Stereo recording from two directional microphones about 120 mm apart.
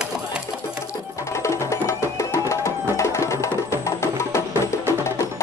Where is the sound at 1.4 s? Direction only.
25° left (ahead or behind).